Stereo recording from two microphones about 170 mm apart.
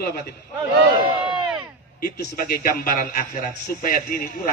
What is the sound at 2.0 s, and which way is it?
A man's voice, 55° left (ahead or behind).